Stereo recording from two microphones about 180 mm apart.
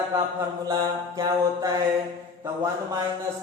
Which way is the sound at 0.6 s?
20° right (ahead or behind).